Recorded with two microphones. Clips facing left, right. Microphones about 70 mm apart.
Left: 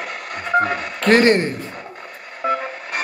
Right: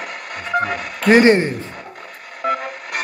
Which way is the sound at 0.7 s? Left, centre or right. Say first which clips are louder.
Right 1 dB; centre.